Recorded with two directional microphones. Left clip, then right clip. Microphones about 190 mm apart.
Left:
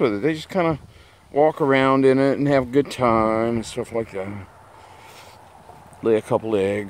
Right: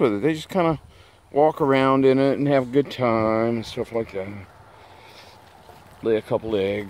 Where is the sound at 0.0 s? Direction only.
15° right (ahead or behind); by 4.4 s 15° left (ahead or behind).